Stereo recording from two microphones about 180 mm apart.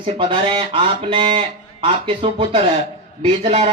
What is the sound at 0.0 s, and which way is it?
A man's voice, 30° right (ahead or behind).